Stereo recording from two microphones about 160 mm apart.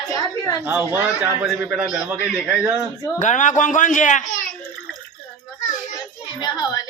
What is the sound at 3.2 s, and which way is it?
A man's voice, 50° left (ahead or behind).